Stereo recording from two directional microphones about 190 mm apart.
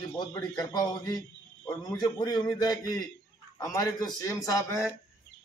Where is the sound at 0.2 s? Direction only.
20° left (ahead or behind).